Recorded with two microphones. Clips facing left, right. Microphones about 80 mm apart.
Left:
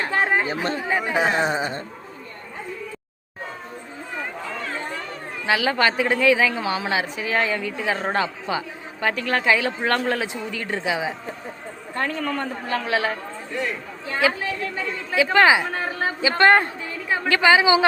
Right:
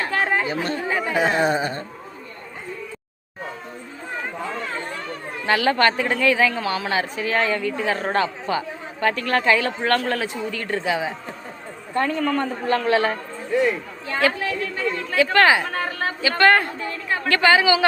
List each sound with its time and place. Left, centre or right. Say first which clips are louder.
0.0 s chatter: left 1 dB; left
0.5 s speech: even; left
5.5 s a man's voice: right 2 dB; centre
11.9 s a man's voice: right 4 dB; centre
15.1 s a man's voice: even; centre
16.9 s a man's voice: left 1 dB; centre